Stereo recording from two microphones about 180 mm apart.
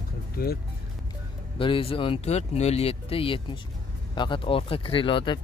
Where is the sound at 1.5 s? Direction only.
30° left (ahead or behind).